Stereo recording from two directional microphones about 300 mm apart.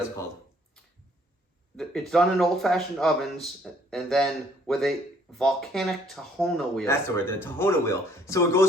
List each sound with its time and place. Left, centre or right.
1.7 s speech: centre